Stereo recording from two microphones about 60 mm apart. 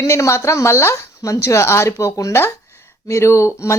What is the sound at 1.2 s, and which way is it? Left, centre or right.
Speech, left.